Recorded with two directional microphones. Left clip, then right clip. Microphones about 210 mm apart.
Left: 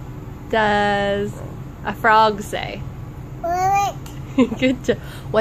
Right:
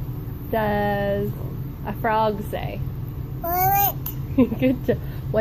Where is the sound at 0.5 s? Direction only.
20° left (ahead or behind).